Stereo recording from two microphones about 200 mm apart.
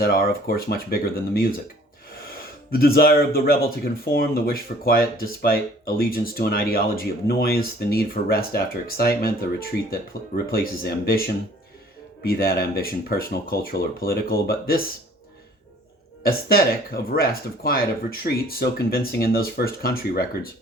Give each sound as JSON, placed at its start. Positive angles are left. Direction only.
{"t": 0.0, "sound": "speech", "side_deg": 50}
{"t": 12.2, "sound": "speech", "side_deg": 50}
{"t": 16.2, "sound": "speech", "side_deg": 50}